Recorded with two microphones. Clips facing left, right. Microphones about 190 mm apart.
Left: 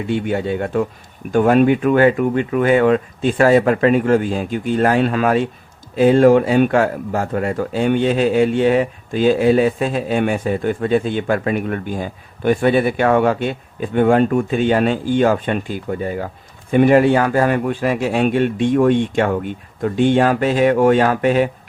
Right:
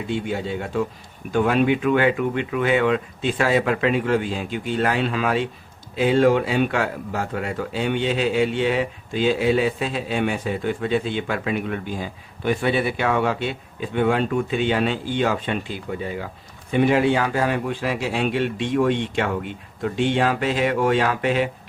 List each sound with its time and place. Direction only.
0.1 s speech: 60° left (ahead or behind)